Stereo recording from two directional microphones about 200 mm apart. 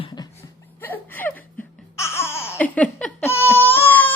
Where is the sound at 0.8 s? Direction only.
10° left (ahead or behind).